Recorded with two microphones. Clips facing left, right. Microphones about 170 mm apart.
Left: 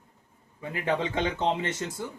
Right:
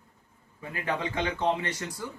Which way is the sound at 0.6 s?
20° left (ahead or behind).